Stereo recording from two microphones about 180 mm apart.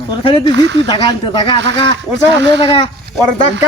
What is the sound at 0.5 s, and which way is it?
Speech, 90° right.